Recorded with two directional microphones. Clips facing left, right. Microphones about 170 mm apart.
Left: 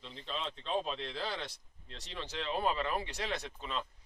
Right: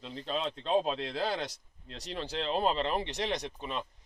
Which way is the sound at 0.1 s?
45° right (ahead or behind).